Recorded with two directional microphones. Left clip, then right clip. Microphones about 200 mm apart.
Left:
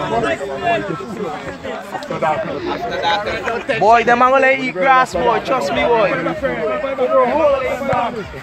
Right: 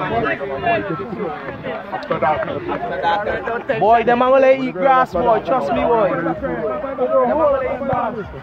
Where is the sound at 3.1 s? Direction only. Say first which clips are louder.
Left 1 dB; 25° right (ahead or behind).